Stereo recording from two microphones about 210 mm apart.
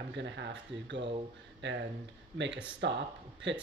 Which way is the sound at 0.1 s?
55° right (ahead or behind).